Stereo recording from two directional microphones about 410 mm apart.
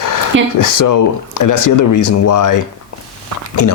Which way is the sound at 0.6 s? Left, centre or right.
Left.